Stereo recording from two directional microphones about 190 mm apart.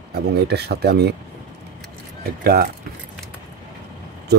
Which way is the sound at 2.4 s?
55° right (ahead or behind).